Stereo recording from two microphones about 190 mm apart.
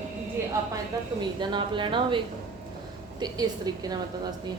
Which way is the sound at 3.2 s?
20° right (ahead or behind).